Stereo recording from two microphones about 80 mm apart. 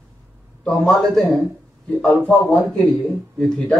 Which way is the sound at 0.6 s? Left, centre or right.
Centre.